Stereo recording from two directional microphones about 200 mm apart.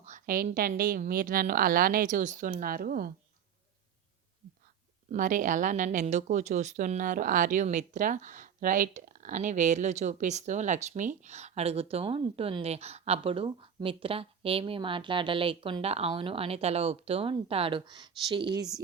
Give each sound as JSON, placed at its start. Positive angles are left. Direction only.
{"t": 0.0, "sound": "a woman's voice", "side_deg": -40}
{"t": 5.1, "sound": "speech", "side_deg": -40}